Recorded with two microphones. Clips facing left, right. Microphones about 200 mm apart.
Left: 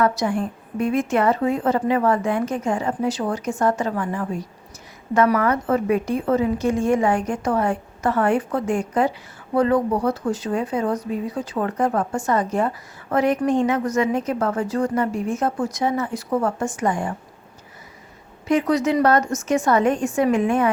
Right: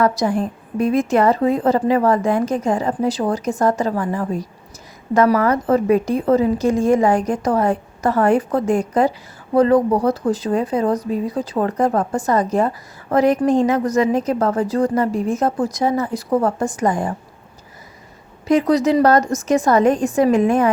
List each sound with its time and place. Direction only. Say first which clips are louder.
0.0 s a woman's voice: right 3 dB; 35° right (ahead or behind)
18.4 s a woman's voice: right 4 dB; 35° right (ahead or behind)